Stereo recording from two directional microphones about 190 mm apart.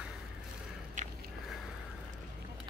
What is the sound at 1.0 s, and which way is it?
Biting, 40° right (ahead or behind).